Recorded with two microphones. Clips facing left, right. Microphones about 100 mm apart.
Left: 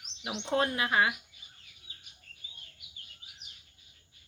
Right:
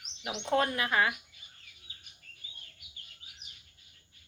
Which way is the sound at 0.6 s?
25° left (ahead or behind).